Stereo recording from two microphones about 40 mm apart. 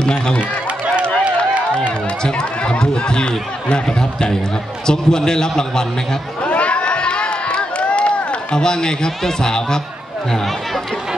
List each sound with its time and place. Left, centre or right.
0.0 s speech: left
1.8 s a man's voice: centre
6.4 s a sound: left